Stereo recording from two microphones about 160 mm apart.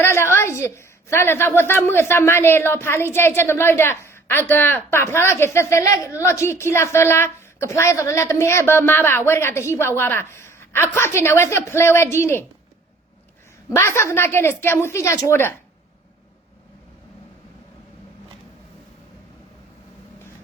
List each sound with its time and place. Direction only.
0.0 s a woman's voice: 15° left (ahead or behind)
13.7 s a woman's voice: 15° left (ahead or behind)